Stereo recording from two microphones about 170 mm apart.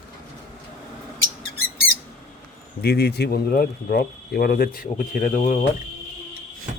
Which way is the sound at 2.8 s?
70° left (ahead or behind).